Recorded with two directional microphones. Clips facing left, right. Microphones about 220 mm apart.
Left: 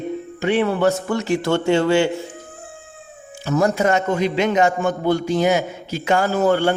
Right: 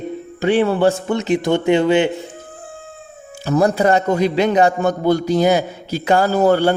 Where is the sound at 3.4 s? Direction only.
35° right (ahead or behind).